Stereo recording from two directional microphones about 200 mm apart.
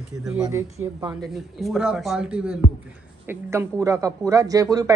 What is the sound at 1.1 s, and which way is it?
Speech, centre (ahead or behind).